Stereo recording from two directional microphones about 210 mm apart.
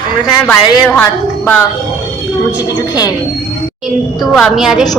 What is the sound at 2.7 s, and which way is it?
Speech, 20° left (ahead or behind).